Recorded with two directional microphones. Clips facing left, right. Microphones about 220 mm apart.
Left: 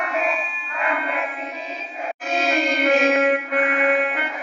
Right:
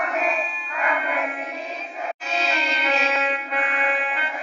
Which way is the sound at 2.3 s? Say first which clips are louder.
Left 7 dB; 50° left (ahead or behind).